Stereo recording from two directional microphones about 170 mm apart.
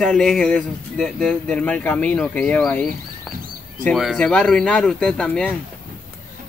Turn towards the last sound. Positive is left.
turn(degrees=5)  # may be behind; listen again after turning